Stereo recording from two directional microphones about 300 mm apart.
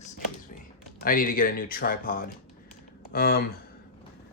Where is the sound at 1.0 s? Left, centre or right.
Left.